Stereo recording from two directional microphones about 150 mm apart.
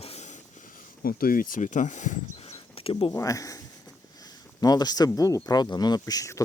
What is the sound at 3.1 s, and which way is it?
Speech, 20° left (ahead or behind).